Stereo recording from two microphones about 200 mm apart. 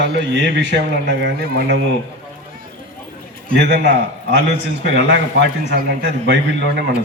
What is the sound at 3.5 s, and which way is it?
A man's voice, 55° right (ahead or behind).